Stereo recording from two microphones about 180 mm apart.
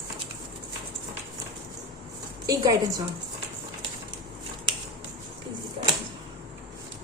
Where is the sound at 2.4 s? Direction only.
20° right (ahead or behind).